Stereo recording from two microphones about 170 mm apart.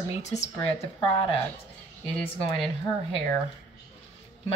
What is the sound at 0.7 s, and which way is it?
Speech, 35° left (ahead or behind).